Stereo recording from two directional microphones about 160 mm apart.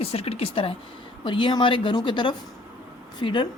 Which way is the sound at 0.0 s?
40° left (ahead or behind).